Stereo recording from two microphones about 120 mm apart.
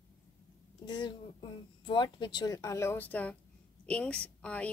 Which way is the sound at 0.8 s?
35° left (ahead or behind).